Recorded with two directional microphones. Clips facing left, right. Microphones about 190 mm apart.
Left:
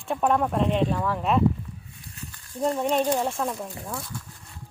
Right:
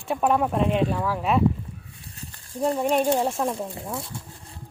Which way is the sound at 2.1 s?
35° right (ahead or behind).